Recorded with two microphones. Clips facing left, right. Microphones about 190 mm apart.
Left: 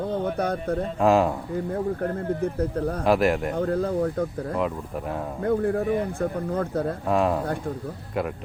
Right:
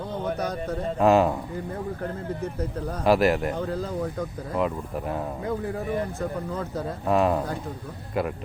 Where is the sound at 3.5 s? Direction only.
60° left (ahead or behind).